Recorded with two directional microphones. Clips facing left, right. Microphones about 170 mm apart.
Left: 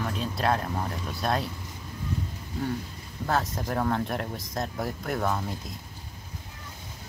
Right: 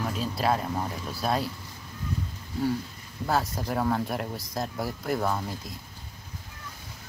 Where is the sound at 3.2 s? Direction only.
Centre (ahead or behind).